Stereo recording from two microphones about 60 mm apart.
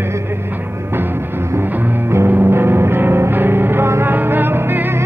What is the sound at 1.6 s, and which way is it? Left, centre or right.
Music, right.